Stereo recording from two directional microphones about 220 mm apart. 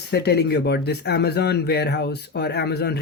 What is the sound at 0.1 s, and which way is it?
Speech, 50° left (ahead or behind).